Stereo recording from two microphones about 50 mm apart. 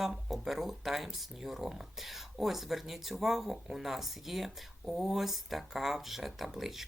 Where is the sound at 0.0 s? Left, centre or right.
Centre.